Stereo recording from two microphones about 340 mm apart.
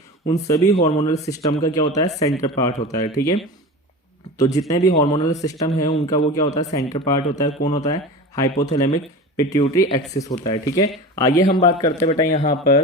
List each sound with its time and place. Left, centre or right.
0.3 s speech: centre